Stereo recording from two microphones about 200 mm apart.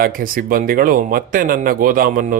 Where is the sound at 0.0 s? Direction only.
45° right (ahead or behind).